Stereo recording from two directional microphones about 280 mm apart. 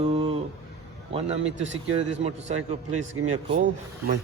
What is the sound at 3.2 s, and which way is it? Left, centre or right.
Speech, right.